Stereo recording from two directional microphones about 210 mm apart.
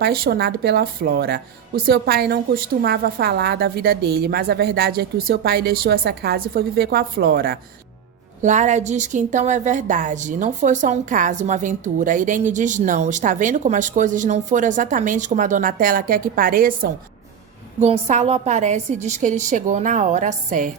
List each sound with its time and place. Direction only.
0.0 s a woman's voice: 50° right (ahead or behind)
8.4 s a woman's voice: 35° right (ahead or behind)
17.7 s a woman's voice: 30° right (ahead or behind)